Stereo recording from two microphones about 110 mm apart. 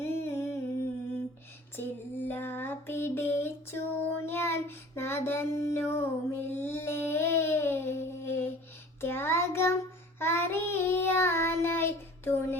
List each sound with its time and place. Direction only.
0.0 s humming: 25° left (ahead or behind)
1.7 s child singing: 20° left (ahead or behind)